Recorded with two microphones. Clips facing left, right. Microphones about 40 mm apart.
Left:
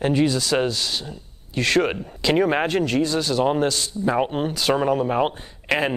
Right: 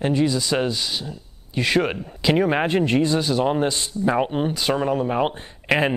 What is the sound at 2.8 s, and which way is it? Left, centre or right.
Speech, right.